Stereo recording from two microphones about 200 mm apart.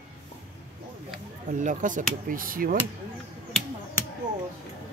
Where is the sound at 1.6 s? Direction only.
40° right (ahead or behind).